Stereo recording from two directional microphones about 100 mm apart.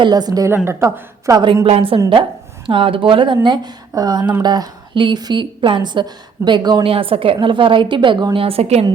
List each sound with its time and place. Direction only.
0.0 s a woman's voice: 40° right (ahead or behind)
0.5 s a woman's voice: 25° right (ahead or behind)
1.3 s a woman's voice: 45° right (ahead or behind)
1.6 s a woman's voice: 70° right (ahead or behind)
3.4 s a woman's voice: 45° right (ahead or behind)
6.8 s a woman's voice: 65° right (ahead or behind); by 8.9 s 85° right